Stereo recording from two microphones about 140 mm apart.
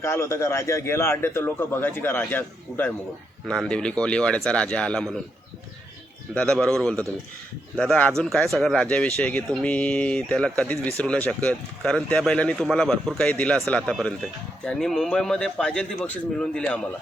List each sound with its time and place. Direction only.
0.0 s speech: 20° left (ahead or behind)
6.3 s a man's voice: 5° left (ahead or behind)